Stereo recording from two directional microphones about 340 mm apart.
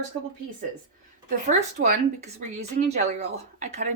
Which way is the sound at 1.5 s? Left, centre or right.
Centre.